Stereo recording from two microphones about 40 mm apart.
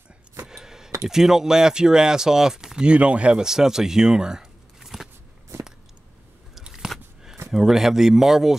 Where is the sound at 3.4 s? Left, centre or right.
Centre.